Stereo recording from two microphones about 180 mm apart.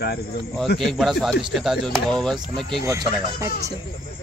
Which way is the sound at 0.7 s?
Centre (ahead or behind).